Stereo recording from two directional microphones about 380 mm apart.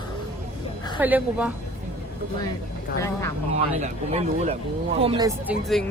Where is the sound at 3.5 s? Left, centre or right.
Centre.